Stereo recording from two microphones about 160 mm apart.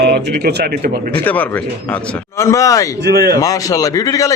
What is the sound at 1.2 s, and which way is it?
A man's voice, 10° left (ahead or behind).